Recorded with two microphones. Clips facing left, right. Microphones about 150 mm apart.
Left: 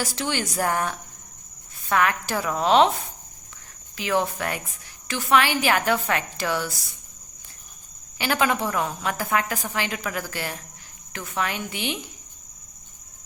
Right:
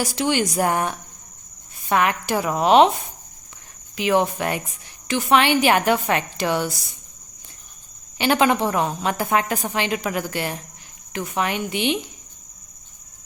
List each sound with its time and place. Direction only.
0.0 s a woman's voice: 15° right (ahead or behind)
3.9 s a woman's voice: 20° right (ahead or behind)
8.2 s a woman's voice: 25° right (ahead or behind)